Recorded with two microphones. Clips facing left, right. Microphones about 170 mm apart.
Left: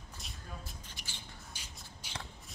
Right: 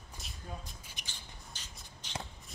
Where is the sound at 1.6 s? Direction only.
10° left (ahead or behind).